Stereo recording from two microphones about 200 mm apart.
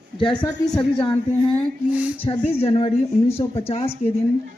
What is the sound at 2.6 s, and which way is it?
A woman's voice, 30° left (ahead or behind).